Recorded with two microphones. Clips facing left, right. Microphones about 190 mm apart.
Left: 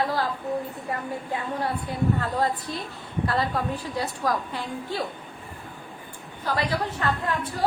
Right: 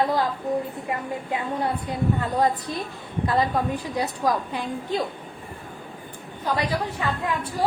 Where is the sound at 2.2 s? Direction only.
15° right (ahead or behind).